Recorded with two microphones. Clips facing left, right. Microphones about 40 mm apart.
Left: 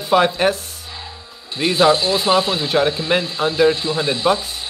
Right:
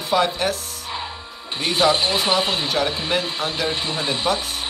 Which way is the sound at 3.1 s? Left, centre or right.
Left.